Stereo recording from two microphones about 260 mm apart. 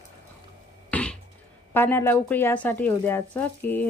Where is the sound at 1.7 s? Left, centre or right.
Centre.